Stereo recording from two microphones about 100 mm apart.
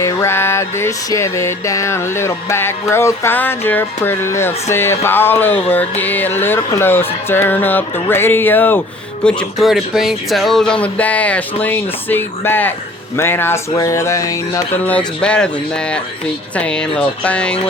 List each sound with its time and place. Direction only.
0.0 s a sound: 25° left (ahead or behind)
9.2 s speech: 10° left (ahead or behind)
9.6 s speech: 5° right (ahead or behind); by 12.7 s 20° left (ahead or behind)
13.1 s a sound: 25° left (ahead or behind)
13.7 s speech: 35° left (ahead or behind)
14.8 s speech: 10° left (ahead or behind)